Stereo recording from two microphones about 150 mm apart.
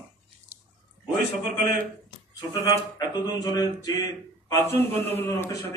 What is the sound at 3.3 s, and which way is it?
A man's voice, 25° left (ahead or behind).